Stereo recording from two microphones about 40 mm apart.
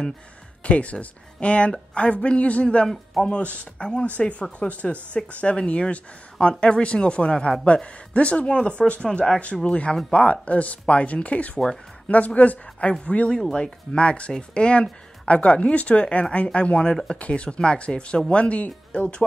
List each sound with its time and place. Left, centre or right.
0.7 s speech: left
3.8 s speech: left
11.5 s speech: centre
12.4 s a woman's voice: left